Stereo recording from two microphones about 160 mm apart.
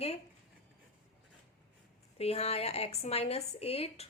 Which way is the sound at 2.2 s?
40° left (ahead or behind).